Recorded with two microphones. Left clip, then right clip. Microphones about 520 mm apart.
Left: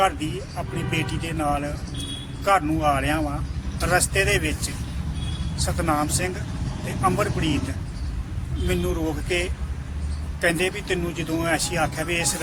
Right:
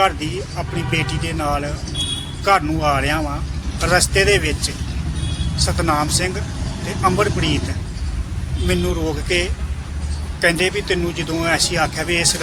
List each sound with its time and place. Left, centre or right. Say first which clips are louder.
0.9 s speech: right 6 dB; left
8.6 s speech: right 5 dB; left